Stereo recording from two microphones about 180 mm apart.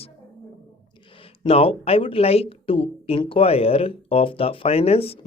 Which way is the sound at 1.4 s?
35° left (ahead or behind).